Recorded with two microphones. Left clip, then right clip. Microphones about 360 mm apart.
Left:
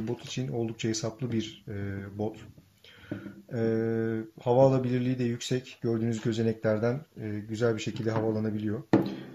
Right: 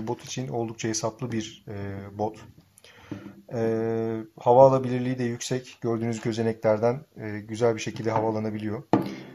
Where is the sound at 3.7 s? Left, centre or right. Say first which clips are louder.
Right 2 dB; right.